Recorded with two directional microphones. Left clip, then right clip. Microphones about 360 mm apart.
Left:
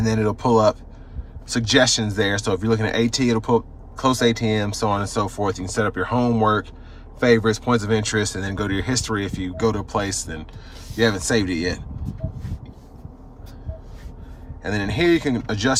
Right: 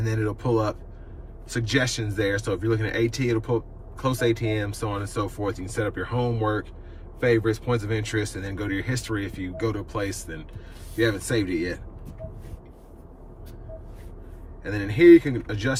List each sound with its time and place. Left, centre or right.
0.0 s speech: centre
14.6 s speech: centre